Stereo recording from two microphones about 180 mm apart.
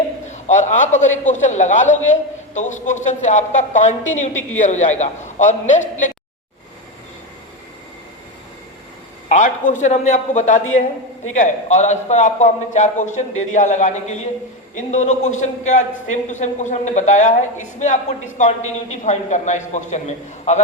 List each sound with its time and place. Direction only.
0.3 s a man's voice: 40° left (ahead or behind)
9.3 s a woman's voice: 45° left (ahead or behind)